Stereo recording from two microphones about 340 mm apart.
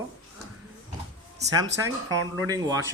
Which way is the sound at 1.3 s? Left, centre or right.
Centre.